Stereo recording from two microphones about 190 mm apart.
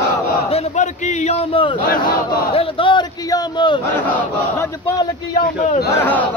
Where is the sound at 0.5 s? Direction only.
35° left (ahead or behind).